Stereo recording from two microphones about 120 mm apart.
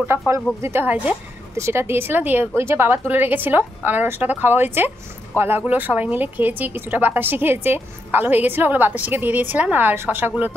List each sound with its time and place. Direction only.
0.6 s a woman's voice: 20° right (ahead or behind)